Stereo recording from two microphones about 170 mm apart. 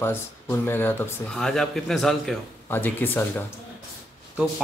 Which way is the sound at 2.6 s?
10° left (ahead or behind).